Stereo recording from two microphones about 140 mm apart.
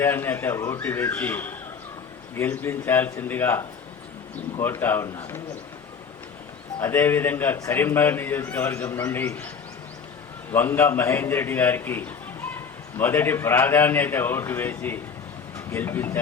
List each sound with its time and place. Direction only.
0.0 s a man's voice: 15° left (ahead or behind)
6.7 s a man's voice: 15° left (ahead or behind)
10.5 s a man's voice: 15° left (ahead or behind)